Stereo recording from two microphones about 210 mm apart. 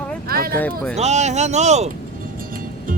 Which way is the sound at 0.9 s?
30° right (ahead or behind).